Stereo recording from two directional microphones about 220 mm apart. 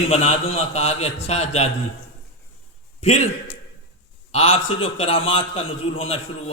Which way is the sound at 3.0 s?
30° left (ahead or behind).